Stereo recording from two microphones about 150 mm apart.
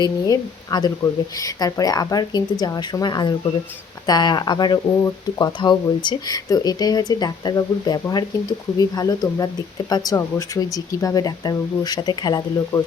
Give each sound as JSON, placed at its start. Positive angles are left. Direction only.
{"t": 0.0, "sound": "speech", "side_deg": 25}